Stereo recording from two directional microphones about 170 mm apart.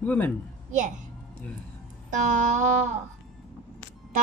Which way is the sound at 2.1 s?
45° right (ahead or behind).